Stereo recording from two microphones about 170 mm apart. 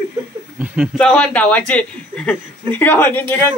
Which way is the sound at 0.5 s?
5° right (ahead or behind).